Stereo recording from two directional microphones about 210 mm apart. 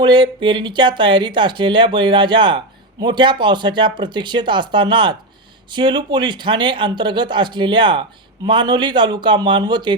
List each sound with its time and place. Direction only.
0.0 s speech: 20° right (ahead or behind)